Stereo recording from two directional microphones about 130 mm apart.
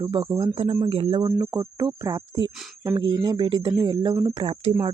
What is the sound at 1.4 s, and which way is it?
Speech, 30° right (ahead or behind).